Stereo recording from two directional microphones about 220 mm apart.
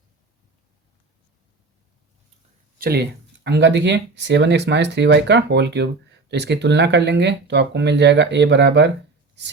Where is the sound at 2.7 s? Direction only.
45° right (ahead or behind).